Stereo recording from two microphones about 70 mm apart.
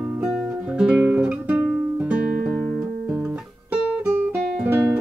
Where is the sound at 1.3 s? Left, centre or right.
Centre.